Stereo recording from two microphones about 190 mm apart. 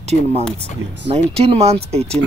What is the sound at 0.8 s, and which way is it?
Speech, 65° right (ahead or behind).